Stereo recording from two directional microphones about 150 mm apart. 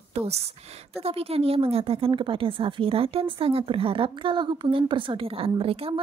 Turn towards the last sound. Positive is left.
turn(degrees=-40)  # may be behind; listen again after turning